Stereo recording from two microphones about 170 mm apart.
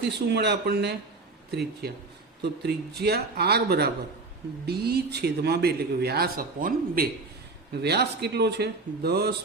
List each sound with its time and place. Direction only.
0.3 s a man's voice: 80° right; by 7.1 s 60° right (ahead or behind)
7.8 s a man's voice: 75° right (ahead or behind)